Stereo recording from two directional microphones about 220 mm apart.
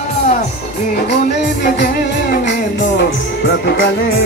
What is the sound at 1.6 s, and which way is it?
Music, 40° left (ahead or behind).